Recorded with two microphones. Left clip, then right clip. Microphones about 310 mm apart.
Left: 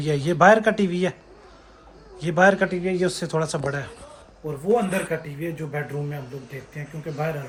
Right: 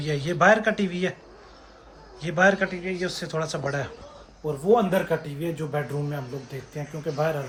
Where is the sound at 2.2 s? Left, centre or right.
Centre.